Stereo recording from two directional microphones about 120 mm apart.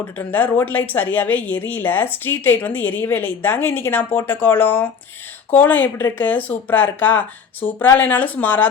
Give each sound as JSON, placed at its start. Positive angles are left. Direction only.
{"t": 0.0, "sound": "speech", "side_deg": 15}